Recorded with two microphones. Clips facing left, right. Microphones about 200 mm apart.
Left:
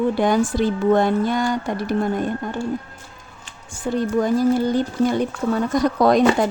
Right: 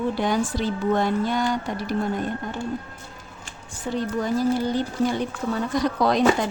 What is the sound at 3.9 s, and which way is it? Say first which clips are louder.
Speech: left 5 dB; 50° left (ahead or behind).